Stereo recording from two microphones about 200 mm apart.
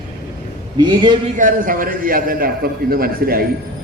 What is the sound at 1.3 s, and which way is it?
A man's voice, 40° right (ahead or behind).